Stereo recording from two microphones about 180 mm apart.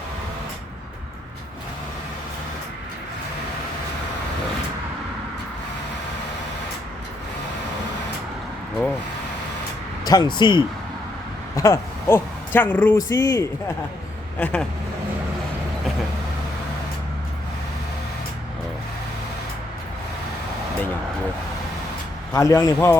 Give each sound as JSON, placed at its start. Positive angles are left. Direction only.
{"t": 10.1, "sound": "speech", "side_deg": 25}
{"t": 11.5, "sound": "speech", "side_deg": 15}
{"t": 14.3, "sound": "speech", "side_deg": 5}
{"t": 22.3, "sound": "speech", "side_deg": 15}